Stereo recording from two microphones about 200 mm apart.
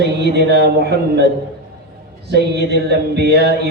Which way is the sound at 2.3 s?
55° right (ahead or behind).